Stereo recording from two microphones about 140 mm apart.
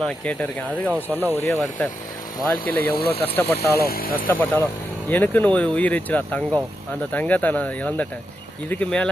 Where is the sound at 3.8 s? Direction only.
90° left.